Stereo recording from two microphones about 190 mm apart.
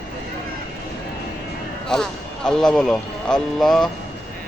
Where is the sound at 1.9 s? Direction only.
5° left (ahead or behind).